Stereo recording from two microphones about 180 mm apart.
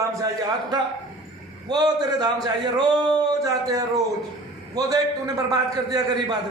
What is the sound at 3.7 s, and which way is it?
A man's voice, 20° right (ahead or behind).